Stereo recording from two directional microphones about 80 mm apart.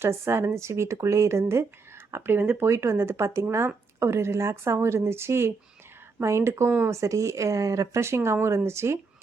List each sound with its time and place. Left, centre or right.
0.0 s speech: right